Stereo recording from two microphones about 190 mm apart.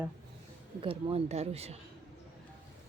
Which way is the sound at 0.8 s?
30° right (ahead or behind).